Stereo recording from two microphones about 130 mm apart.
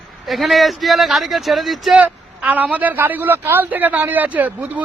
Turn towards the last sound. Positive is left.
turn(degrees=-10)  # may be behind; listen again after turning